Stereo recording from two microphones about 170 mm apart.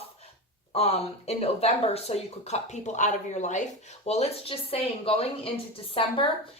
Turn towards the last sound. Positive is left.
turn(degrees=30)  # may be behind; listen again after turning